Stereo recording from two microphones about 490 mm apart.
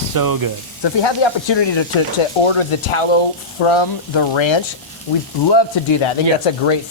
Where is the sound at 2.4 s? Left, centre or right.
Left.